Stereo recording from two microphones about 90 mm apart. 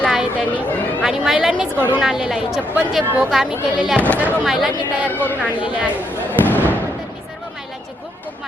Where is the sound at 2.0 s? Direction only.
5° right (ahead or behind).